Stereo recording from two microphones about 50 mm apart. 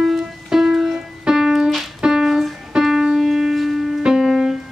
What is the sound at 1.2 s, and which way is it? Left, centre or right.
Piano, centre.